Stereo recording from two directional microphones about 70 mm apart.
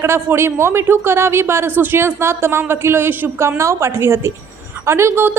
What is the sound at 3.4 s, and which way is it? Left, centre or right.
A woman's voice, right.